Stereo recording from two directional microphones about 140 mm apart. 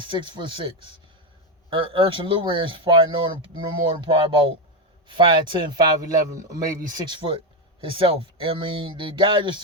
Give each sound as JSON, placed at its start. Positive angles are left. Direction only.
{"t": 0.0, "sound": "a man's voice", "side_deg": -35}